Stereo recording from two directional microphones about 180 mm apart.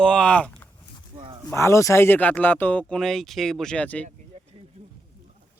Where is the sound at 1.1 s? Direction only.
25° right (ahead or behind).